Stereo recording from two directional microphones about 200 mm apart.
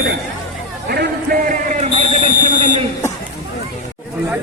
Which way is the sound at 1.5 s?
35° right (ahead or behind).